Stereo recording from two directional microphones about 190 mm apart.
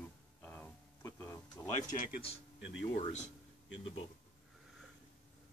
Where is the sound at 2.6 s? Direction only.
70° left (ahead or behind).